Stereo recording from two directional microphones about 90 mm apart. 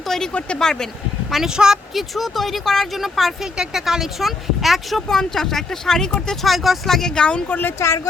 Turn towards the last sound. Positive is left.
turn(degrees=20)  # may be behind; listen again after turning